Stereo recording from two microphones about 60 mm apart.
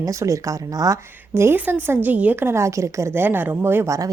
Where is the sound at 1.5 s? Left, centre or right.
Right.